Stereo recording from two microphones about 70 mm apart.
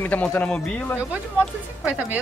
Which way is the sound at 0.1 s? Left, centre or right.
Left.